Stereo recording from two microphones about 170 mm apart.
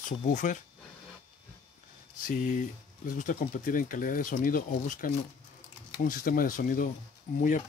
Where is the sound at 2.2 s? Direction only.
50° left (ahead or behind).